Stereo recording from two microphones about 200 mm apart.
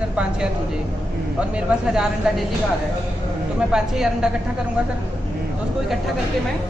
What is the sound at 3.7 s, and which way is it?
Speech, 5° right (ahead or behind).